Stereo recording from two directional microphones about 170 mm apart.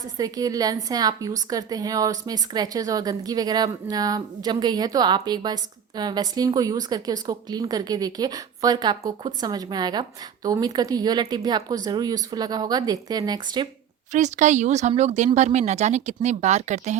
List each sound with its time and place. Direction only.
0.2 s speech: 20° right (ahead or behind)
14.1 s speech: 45° right (ahead or behind)